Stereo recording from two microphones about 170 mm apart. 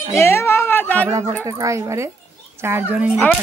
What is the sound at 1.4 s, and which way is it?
Speech, 20° right (ahead or behind).